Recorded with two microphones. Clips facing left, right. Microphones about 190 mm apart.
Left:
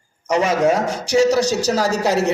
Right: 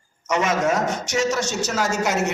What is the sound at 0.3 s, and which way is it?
A man's voice, 30° left (ahead or behind).